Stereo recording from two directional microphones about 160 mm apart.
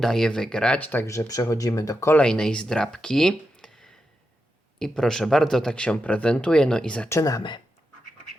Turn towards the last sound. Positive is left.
turn(degrees=25)  # may be behind; listen again after turning